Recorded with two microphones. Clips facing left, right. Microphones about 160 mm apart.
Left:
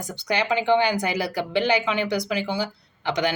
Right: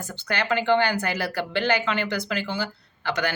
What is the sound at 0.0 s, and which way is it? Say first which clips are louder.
A woman's voice: left 3 dB; 15° left (ahead or behind).